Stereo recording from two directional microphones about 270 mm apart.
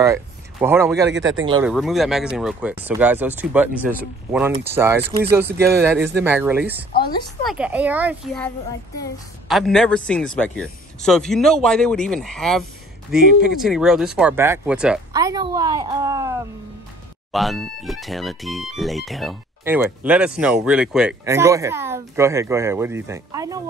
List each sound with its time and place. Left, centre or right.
0.0 s speech: centre
1.1 s speech: right
1.6 s speech: centre
9.5 s speech: centre
17.3 s speech: centre